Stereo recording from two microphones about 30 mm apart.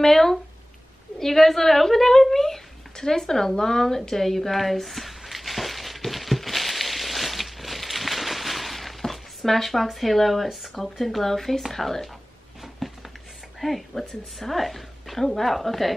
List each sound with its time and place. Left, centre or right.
0.0 s a woman's voice: centre
4.1 s a sound: centre
9.9 s a woman's voice: centre
13.6 s a woman's voice: centre